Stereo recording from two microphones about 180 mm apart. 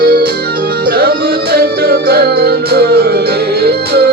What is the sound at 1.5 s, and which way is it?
Music, 60° right (ahead or behind).